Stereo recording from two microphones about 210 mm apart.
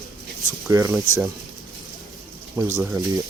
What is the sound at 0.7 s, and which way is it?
Speech, 15° right (ahead or behind).